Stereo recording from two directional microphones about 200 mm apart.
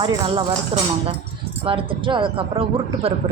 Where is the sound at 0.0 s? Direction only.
25° right (ahead or behind).